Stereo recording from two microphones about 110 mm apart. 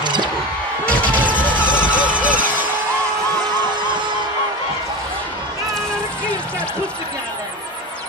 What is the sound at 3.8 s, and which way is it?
Music, 45° right (ahead or behind).